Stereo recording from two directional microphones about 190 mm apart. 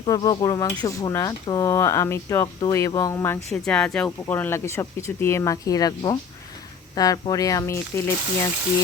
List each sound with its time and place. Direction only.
0.0 s speech: 20° left (ahead or behind)
3.5 s speech: 5° left (ahead or behind)